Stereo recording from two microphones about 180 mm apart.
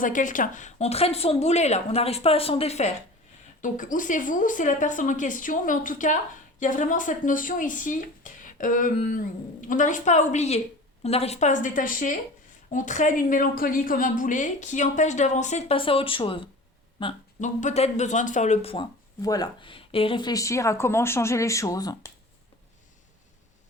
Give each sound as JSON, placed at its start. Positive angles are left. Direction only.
{"t": 0.0, "sound": "a woman's voice", "side_deg": 45}
{"t": 17.4, "sound": "speech", "side_deg": 40}